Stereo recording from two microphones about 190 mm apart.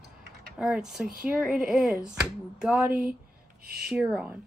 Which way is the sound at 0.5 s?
5° right (ahead or behind).